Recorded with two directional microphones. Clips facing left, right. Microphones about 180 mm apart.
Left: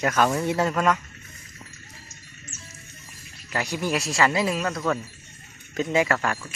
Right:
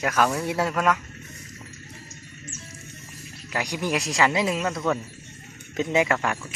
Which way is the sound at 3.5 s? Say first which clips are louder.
Even; 15° right (ahead or behind).